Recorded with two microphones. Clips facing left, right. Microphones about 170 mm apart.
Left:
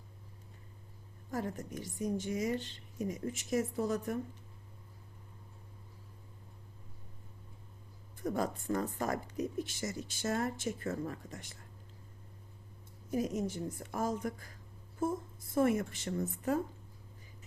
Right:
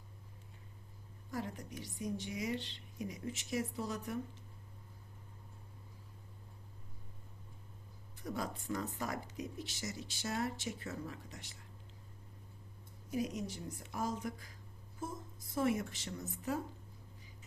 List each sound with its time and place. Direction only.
1.3 s speech: 45° left (ahead or behind)
8.2 s speech: 50° left (ahead or behind)
13.1 s speech: 50° left (ahead or behind)